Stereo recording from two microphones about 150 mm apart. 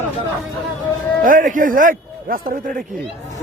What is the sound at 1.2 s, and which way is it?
Speech, 65° right (ahead or behind).